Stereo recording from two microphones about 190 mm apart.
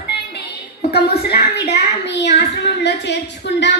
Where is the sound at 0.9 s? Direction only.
55° left (ahead or behind).